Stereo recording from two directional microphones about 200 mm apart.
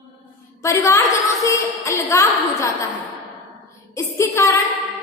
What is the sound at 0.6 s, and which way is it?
A woman's voice, 15° left (ahead or behind).